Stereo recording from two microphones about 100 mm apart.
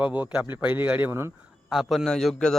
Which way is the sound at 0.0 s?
15° right (ahead or behind).